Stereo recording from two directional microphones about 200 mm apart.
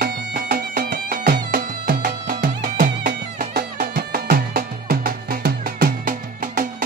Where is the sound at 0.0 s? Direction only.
50° right (ahead or behind).